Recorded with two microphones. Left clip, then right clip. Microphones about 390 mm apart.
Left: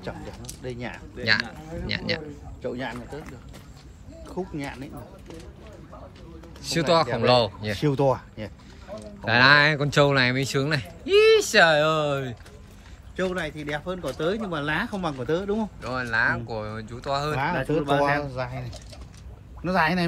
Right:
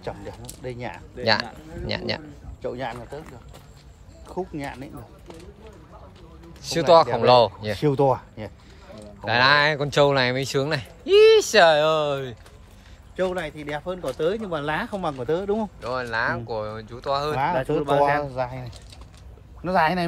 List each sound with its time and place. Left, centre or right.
0.0 s speech: right
1.2 s speech: centre
2.6 s speech: right
4.4 s speech: right
6.6 s speech: centre
7.7 s speech: right
9.2 s speech: centre
13.1 s speech: right
15.8 s speech: centre
17.4 s speech: right
19.6 s speech: right